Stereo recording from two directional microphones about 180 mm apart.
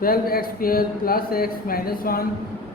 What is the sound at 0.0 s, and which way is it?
Speech, 55° left (ahead or behind).